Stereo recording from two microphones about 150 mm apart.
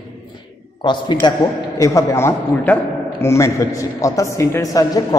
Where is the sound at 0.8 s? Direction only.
30° left (ahead or behind).